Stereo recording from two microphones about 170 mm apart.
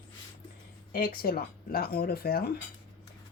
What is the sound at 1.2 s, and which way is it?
Speech, 60° left (ahead or behind).